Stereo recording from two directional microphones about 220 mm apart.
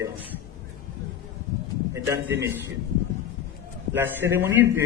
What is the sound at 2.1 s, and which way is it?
Speech, 15° right (ahead or behind).